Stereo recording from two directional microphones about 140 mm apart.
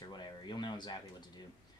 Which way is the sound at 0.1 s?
30° left (ahead or behind).